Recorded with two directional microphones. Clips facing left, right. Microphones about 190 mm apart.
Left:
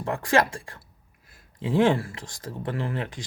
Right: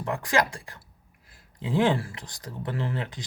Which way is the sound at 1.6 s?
20° right (ahead or behind).